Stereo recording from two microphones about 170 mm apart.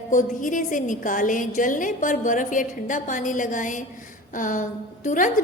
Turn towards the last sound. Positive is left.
turn(degrees=50)  # may be behind; listen again after turning